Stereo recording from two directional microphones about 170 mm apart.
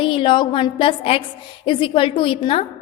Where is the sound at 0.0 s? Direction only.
30° left (ahead or behind).